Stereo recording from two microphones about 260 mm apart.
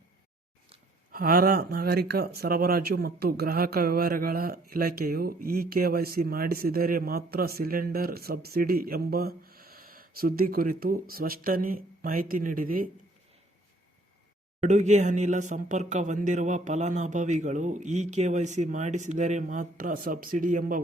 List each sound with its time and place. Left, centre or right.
1.1 s speech: right
14.6 s speech: right